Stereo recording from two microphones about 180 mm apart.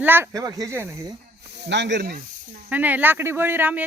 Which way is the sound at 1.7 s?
70° right (ahead or behind).